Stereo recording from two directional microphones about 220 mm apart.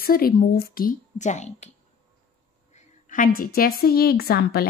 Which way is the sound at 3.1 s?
40° left (ahead or behind).